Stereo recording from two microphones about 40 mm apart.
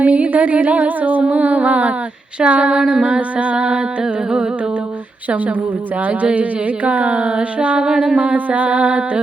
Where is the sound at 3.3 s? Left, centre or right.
Right.